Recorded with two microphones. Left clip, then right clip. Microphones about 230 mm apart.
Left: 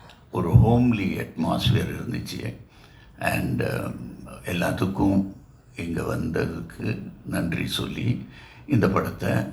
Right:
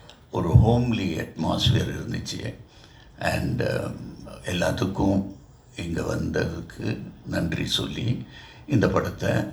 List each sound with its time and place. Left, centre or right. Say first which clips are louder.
0.3 s speech: left 1 dB; right